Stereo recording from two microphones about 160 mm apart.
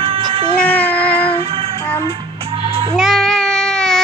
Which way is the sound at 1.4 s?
35° right (ahead or behind).